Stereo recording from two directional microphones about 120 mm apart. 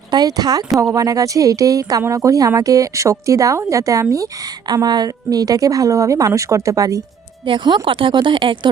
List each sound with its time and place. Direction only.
0.1 s a woman's voice: 35° right (ahead or behind)
7.4 s speech: 40° right (ahead or behind)